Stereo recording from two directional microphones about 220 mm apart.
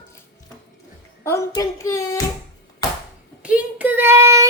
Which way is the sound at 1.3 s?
15° left (ahead or behind).